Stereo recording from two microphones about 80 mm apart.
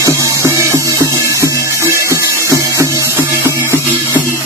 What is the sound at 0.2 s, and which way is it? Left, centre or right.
Music, right.